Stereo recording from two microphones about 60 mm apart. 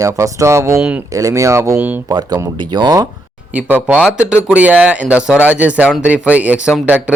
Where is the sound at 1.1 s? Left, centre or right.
Right.